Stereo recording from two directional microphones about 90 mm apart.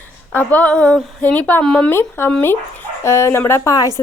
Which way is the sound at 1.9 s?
25° left (ahead or behind).